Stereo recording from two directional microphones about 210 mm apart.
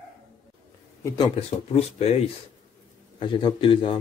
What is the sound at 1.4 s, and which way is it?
Speech, 30° left (ahead or behind).